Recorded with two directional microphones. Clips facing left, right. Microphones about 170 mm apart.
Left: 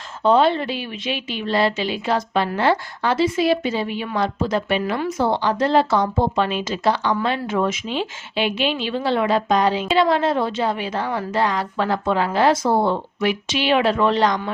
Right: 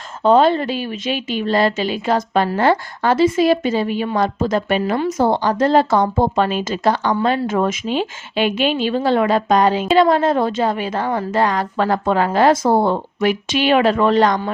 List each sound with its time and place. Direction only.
0.2 s speech: 45° right (ahead or behind)